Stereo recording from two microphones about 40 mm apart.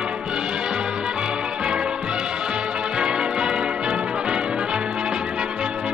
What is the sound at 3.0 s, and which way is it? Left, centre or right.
Change ringing, right.